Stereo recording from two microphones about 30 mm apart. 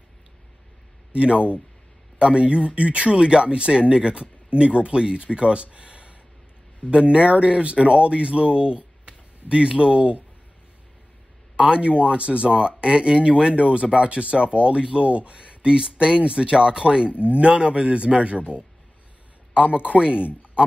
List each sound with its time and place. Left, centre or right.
1.1 s speech: right
11.5 s speech: right
15.0 s speech: right
19.5 s a man's voice: right
20.0 s speech: right